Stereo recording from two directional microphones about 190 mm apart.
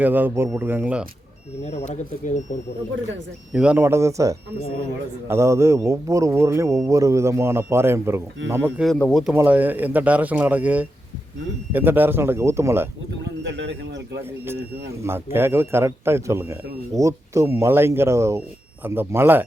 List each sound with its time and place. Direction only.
0.0 s speech: 10° right (ahead or behind)
1.9 s speech: 40° left (ahead or behind)
3.5 s speech: 5° right (ahead or behind)
8.8 s speech: 5° left (ahead or behind)
9.3 s speech: 10° right (ahead or behind)
13.5 s speech: 65° right (ahead or behind)
14.3 s speech: 10° right (ahead or behind)